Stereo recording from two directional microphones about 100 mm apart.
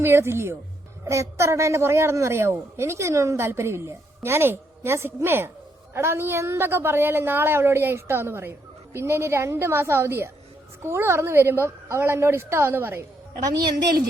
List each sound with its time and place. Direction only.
0.0 s a woman's voice: 25° right (ahead or behind)